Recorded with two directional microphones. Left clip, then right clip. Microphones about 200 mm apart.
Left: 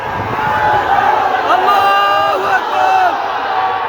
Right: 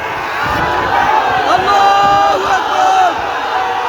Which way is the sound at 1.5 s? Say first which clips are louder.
Right 1 dB; centre (ahead or behind).